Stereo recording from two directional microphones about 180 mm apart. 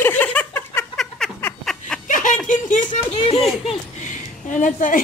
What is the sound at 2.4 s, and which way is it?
Speech, 45° left (ahead or behind).